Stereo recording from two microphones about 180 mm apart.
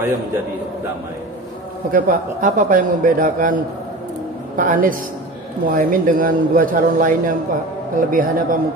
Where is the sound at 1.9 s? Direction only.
50° right (ahead or behind).